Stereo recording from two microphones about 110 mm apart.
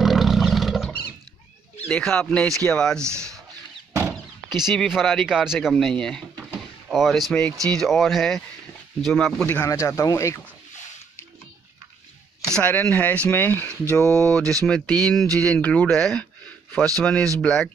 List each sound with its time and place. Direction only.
0.0 s a sound: centre (ahead or behind)
1.9 s speech: 10° left (ahead or behind)
3.0 s speech: 25° right (ahead or behind)
4.1 s speech: centre (ahead or behind)
9.6 s speech: 25° left (ahead or behind)
12.5 s speech: 10° left (ahead or behind)